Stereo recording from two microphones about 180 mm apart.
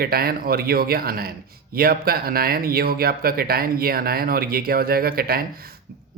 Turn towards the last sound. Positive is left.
turn(degrees=-55)  # may be behind; listen again after turning